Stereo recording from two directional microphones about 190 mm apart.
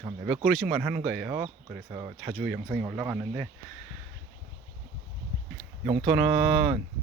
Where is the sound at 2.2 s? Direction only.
Centre (ahead or behind).